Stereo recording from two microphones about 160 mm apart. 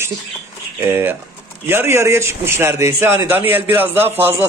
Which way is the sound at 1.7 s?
15° right (ahead or behind).